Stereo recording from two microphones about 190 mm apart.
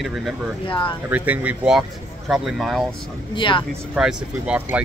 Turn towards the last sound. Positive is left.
turn(degrees=-5)  # may be behind; listen again after turning